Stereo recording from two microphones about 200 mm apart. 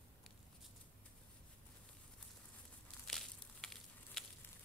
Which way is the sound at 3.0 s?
Centre (ahead or behind).